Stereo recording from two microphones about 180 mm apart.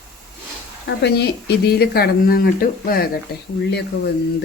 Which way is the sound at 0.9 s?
65° left (ahead or behind).